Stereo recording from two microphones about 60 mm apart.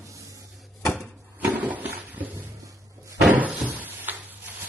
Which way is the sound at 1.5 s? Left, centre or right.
Right.